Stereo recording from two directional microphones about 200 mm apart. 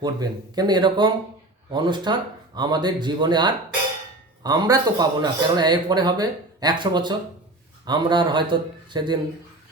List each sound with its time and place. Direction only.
0.0 s speech: 20° right (ahead or behind)